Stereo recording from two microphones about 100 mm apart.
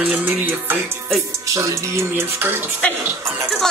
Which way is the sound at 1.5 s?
25° right (ahead or behind).